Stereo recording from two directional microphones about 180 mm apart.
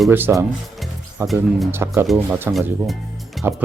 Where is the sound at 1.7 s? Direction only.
15° right (ahead or behind).